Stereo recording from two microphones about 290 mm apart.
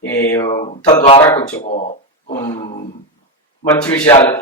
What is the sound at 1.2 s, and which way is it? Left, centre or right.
Speech, centre.